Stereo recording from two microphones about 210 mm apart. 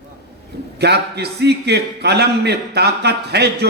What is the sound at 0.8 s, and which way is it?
A man's voice, 50° right (ahead or behind).